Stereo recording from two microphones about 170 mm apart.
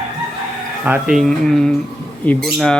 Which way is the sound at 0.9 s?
5° right (ahead or behind).